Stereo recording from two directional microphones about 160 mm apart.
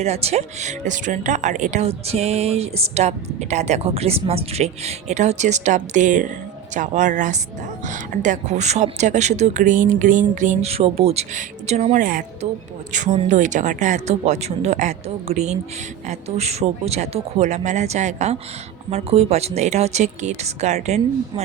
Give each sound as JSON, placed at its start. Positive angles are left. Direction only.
{"t": 0.0, "sound": "speech", "side_deg": -40}